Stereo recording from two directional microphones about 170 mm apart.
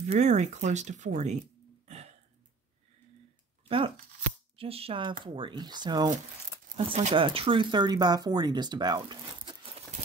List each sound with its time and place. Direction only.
0.1 s speech: 45° right (ahead or behind)
1.9 s burping: 40° right (ahead or behind)
3.6 s speech: 30° right (ahead or behind)
6.7 s speech: 40° right (ahead or behind)